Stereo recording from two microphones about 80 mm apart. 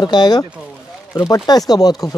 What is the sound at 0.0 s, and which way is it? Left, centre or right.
Speech, left.